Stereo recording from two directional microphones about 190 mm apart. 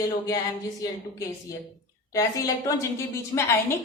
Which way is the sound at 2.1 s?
20° left (ahead or behind).